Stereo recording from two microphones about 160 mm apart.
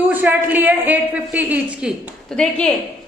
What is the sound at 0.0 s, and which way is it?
A woman's voice, 10° right (ahead or behind).